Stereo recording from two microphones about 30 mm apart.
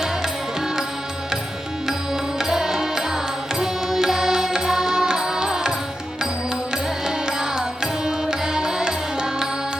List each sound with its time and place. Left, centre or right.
2.4 s music: centre
7.3 s music: right